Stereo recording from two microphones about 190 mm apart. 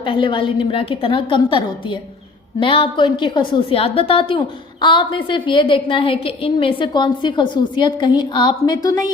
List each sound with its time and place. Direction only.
0.0 s a woman's voice: 25° left (ahead or behind)